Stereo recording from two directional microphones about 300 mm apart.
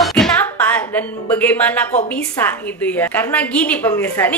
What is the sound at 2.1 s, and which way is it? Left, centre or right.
Speech, centre.